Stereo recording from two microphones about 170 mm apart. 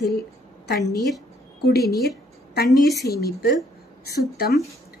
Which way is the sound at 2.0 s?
65° left (ahead or behind).